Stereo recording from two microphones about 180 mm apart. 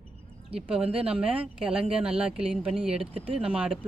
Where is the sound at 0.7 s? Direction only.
5° right (ahead or behind).